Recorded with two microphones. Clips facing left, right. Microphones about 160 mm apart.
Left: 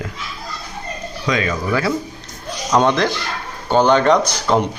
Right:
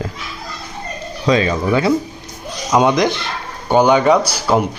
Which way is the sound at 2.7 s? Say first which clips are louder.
Right 2 dB; 10° right (ahead or behind).